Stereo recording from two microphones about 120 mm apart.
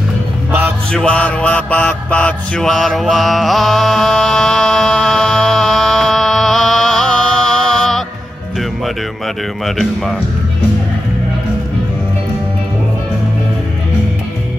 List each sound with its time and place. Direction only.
0.5 s music: 15° right (ahead or behind)
0.9 s mantra: 10° left (ahead or behind)